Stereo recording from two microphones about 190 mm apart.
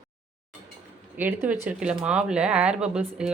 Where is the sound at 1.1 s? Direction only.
10° right (ahead or behind).